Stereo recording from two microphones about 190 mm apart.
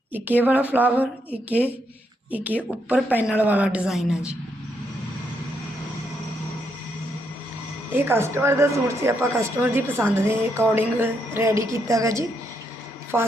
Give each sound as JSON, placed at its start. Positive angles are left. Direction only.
{"t": 0.1, "sound": "speech", "side_deg": -10}
{"t": 7.9, "sound": "speech", "side_deg": -10}